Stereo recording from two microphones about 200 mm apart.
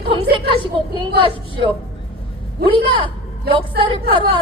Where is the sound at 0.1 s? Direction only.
25° right (ahead or behind).